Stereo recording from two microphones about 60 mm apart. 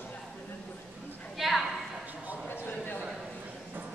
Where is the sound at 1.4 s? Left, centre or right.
Centre.